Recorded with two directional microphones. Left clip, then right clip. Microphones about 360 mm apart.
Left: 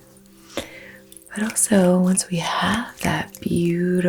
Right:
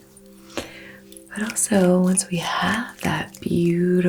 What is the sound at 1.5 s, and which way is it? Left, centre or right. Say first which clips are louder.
Speech: left 1 dB; left.